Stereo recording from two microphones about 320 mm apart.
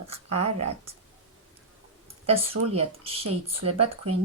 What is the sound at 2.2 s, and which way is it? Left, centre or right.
Speech, centre.